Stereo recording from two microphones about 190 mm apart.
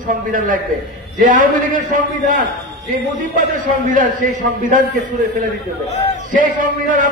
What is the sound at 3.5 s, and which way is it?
Speech, 45° right (ahead or behind).